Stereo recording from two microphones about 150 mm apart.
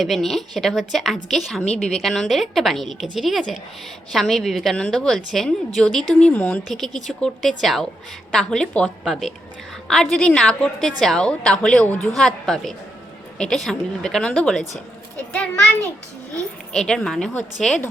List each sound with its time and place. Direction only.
0.0 s a woman's voice: centre (ahead or behind)
1.6 s a woman's voice: 45° left (ahead or behind)
1.9 s a woman's voice: centre (ahead or behind)
16.7 s a woman's voice: 5° left (ahead or behind)